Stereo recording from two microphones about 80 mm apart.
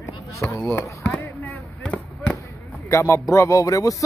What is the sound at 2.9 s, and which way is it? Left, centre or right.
Speech, left.